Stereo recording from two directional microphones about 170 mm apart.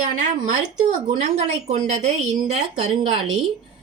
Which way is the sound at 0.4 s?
50° right (ahead or behind).